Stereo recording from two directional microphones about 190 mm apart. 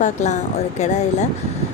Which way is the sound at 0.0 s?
40° left (ahead or behind).